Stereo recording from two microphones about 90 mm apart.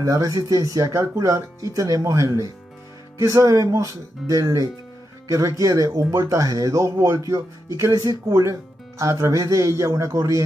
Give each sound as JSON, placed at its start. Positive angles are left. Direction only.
{"t": 0.0, "sound": "speech", "side_deg": -35}